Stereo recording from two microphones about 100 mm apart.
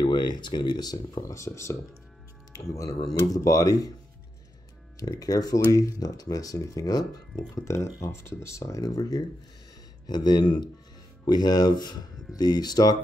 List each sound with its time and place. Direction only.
0.0 s speech: 45° left (ahead or behind)
4.9 s speech: 40° left (ahead or behind)